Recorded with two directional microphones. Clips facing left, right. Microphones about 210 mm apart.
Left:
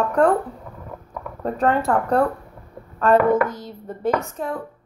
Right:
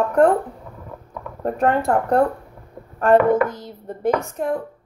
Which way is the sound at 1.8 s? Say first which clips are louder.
Right 1 dB; 25° right (ahead or behind).